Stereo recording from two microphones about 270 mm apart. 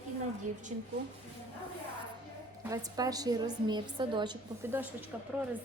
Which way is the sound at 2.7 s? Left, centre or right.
Centre.